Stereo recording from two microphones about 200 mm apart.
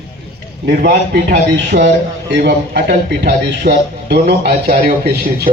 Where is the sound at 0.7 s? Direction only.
55° right (ahead or behind).